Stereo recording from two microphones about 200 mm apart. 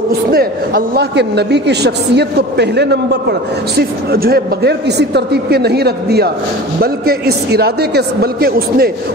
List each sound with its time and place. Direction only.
0.3 s a man's voice: 50° right (ahead or behind)